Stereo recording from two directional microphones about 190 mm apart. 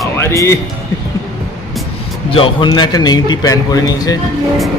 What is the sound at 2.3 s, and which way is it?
Speech, 30° left (ahead or behind).